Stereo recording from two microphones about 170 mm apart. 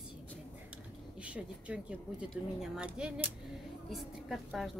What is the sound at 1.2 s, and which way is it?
Speech, 5° right (ahead or behind).